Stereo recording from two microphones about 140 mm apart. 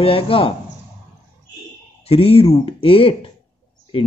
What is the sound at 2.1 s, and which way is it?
Speech, 45° left (ahead or behind).